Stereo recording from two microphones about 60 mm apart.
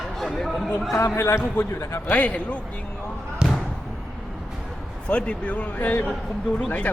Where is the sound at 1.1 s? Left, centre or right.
Left.